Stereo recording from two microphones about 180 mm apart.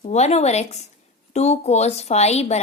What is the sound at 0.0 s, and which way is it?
A woman's voice, 40° left (ahead or behind).